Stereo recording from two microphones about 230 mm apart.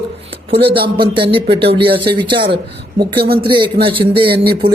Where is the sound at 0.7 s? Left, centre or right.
Right.